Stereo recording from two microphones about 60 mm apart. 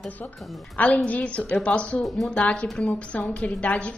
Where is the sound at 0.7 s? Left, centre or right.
Left.